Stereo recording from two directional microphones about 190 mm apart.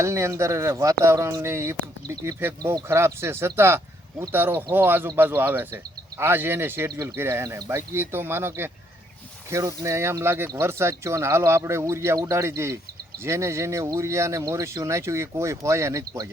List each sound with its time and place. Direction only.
0.0 s speech: 15° right (ahead or behind)